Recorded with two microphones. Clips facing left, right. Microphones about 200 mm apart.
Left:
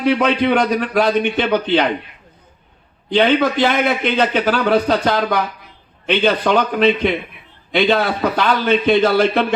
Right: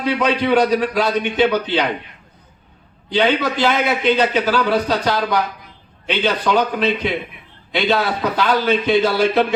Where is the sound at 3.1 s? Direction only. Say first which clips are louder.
Left 3 dB; 55° left (ahead or behind).